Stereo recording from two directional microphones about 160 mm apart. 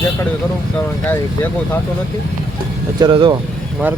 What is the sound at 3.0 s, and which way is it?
Speech, 30° right (ahead or behind).